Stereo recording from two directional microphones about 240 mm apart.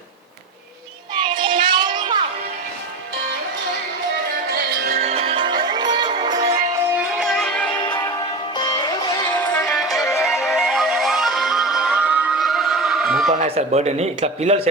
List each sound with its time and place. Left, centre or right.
1.1 s child singing: centre
4.9 s music: right
7.2 s music: centre
8.6 s music: centre
9.5 s music: centre
13.4 s speech: right